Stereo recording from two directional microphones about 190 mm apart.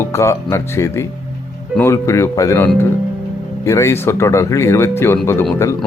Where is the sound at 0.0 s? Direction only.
15° left (ahead or behind).